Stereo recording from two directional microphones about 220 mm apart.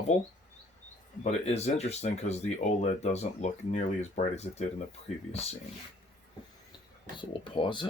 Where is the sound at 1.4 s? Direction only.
30° left (ahead or behind).